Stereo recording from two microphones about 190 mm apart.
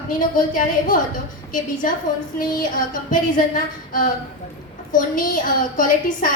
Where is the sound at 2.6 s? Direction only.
45° left (ahead or behind).